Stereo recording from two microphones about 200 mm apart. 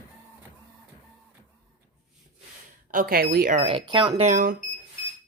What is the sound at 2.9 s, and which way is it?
Speech, 50° right (ahead or behind).